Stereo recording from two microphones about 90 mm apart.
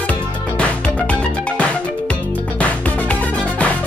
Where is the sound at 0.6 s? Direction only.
15° left (ahead or behind).